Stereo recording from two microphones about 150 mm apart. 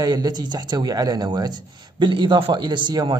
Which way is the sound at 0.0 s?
25° right (ahead or behind).